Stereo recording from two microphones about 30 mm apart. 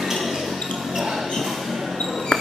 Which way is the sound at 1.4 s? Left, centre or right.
Centre.